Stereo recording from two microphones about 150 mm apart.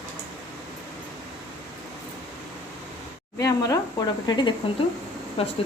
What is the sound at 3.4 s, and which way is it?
Speech, 25° left (ahead or behind).